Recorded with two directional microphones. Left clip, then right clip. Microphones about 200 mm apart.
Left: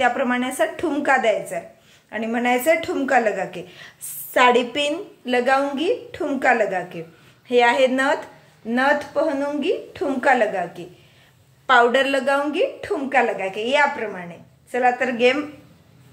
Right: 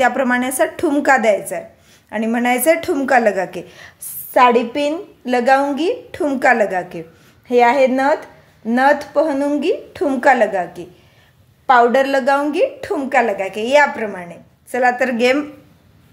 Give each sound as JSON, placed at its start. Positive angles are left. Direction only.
{"t": 0.0, "sound": "a woman's voice", "side_deg": -50}
{"t": 4.3, "sound": "speech", "side_deg": -25}
{"t": 5.2, "sound": "a woman's voice", "side_deg": -40}
{"t": 7.4, "sound": "speech", "side_deg": -30}
{"t": 8.6, "sound": "a woman's voice", "side_deg": -45}
{"t": 11.6, "sound": "a woman's voice", "side_deg": -25}